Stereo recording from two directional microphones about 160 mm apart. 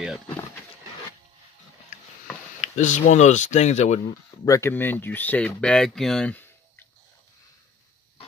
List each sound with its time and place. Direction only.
2.6 s speech: 50° left (ahead or behind)
4.5 s speech: 15° left (ahead or behind)